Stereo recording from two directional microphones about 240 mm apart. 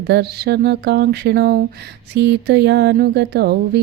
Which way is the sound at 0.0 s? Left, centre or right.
Right.